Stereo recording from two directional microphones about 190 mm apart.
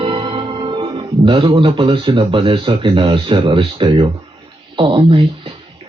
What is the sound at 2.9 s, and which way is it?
Speech, 25° right (ahead or behind).